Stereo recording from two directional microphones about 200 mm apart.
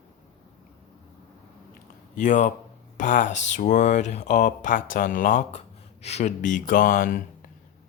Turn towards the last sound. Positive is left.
turn(degrees=45)  # may be behind; listen again after turning